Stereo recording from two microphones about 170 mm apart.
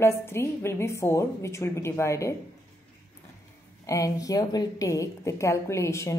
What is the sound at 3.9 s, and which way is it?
A woman's voice, 20° left (ahead or behind).